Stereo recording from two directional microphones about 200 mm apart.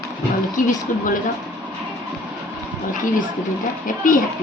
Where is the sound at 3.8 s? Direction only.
40° left (ahead or behind).